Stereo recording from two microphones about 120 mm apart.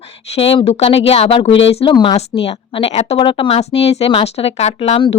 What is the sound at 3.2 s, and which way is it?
Speech, 45° left (ahead or behind).